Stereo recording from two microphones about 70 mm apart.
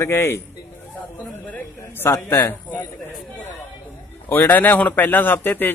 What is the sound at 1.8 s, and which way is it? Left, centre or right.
Speech, left.